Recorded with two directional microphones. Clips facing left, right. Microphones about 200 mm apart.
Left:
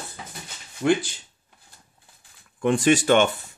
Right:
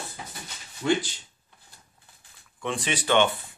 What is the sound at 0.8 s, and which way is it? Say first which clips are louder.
Speech: left 4 dB; 50° left (ahead or behind).